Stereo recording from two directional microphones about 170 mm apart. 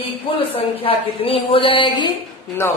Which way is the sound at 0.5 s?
35° left (ahead or behind).